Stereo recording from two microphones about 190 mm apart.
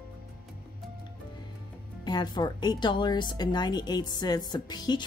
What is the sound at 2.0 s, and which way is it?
Speech, 20° left (ahead or behind).